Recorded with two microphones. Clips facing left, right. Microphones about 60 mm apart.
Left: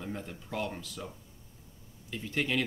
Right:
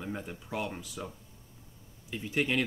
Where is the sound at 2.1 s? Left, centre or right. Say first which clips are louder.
Right 2 dB; centre.